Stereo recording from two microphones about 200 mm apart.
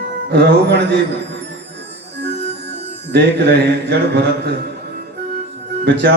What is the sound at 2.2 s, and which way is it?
Music, 55° right (ahead or behind).